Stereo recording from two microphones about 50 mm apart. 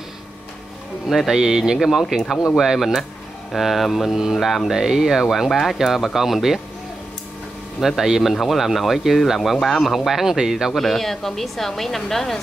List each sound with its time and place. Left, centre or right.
1.0 s speech: centre
7.8 s speech: centre
10.8 s speech: centre